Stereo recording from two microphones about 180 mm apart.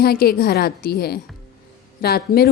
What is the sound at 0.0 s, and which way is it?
A woman's voice, 60° left (ahead or behind).